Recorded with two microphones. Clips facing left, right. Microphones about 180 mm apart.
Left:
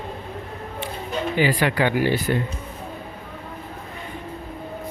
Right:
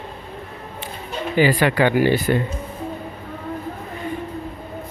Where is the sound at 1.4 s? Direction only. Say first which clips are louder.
Right 4 dB; 50° right (ahead or behind).